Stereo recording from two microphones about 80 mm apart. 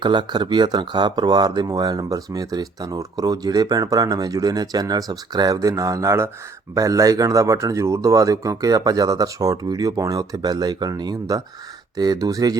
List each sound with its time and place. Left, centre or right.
0.0 s speech: right